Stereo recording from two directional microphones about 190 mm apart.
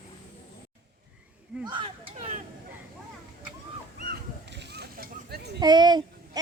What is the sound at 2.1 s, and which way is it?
Speech, 40° right (ahead or behind).